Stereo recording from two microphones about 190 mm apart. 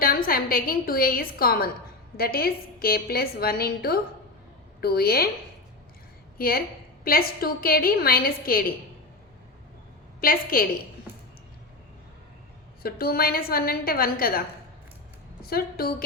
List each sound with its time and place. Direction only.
0.0 s a woman's voice: 50° left (ahead or behind)
7.0 s a woman's voice: 50° left (ahead or behind)
10.2 s a woman's voice: 50° left (ahead or behind)
12.8 s a woman's voice: 50° left (ahead or behind)